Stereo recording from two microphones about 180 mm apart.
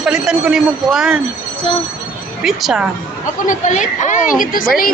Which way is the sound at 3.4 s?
45° left (ahead or behind).